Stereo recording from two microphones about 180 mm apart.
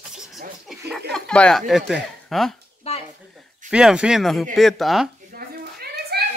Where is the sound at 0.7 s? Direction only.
Centre (ahead or behind).